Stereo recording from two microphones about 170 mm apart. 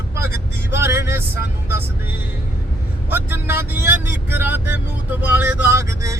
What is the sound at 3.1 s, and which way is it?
Speech, 10° right (ahead or behind).